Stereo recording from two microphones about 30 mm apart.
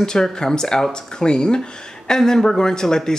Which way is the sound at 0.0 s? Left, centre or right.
Left.